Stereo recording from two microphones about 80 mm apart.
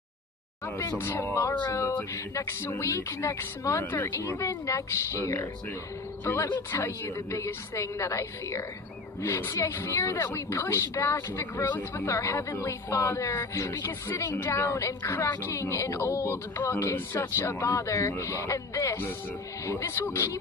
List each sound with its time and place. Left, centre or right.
0.9 s a woman's voice: left
3.8 s a woman's voice: left
16.8 s a woman's voice: left